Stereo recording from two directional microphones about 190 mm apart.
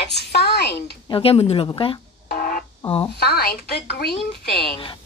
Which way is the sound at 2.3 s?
50° left (ahead or behind).